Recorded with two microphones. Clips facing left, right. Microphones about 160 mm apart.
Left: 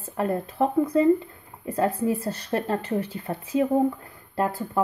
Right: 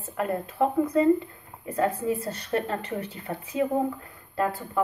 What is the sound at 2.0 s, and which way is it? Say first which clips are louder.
Speech: left 2 dB; 35° left (ahead or behind).